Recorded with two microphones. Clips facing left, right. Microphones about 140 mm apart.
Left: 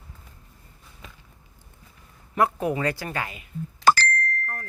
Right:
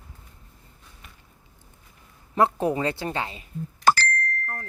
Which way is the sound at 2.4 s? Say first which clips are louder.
Right 1 dB; 30° right (ahead or behind).